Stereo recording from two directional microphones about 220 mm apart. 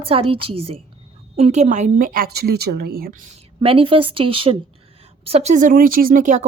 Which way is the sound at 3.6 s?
25° right (ahead or behind).